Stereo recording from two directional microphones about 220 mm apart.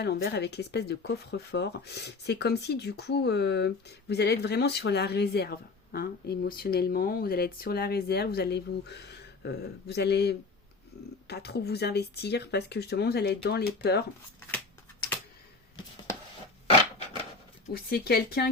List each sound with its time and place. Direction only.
0.0 s speech: 50° left (ahead or behind)
17.7 s speech: 45° left (ahead or behind)